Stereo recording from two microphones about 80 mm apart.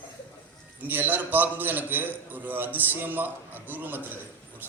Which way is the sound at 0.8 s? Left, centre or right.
Right.